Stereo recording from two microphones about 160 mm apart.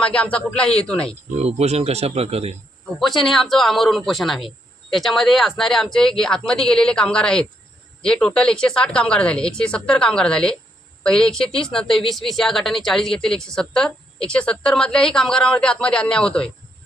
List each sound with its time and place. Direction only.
0.0 s speech: 5° left (ahead or behind)
1.4 s speech: 40° right (ahead or behind)
3.0 s speech: centre (ahead or behind)